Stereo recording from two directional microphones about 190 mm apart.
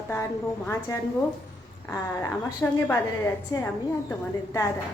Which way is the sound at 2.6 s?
15° left (ahead or behind).